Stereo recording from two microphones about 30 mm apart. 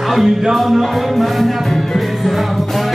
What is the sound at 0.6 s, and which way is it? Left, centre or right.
Music, centre.